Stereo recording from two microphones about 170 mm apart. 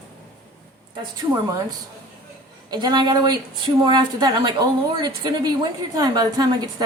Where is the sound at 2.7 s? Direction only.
25° right (ahead or behind).